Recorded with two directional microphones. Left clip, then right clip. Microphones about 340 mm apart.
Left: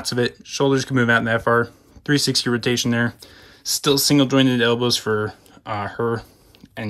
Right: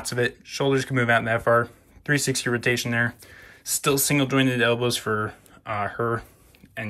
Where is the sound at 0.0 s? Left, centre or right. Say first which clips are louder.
Left 3 dB; centre.